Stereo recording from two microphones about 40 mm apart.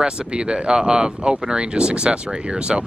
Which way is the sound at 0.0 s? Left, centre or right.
Right.